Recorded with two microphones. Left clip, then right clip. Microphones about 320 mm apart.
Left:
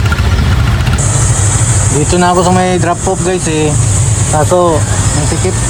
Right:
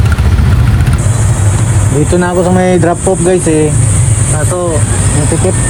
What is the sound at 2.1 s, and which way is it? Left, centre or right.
Speech, centre.